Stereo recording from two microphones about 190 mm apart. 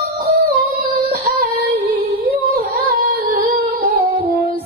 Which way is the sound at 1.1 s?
55° right (ahead or behind).